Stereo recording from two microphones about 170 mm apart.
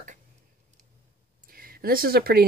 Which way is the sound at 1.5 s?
60° right (ahead or behind).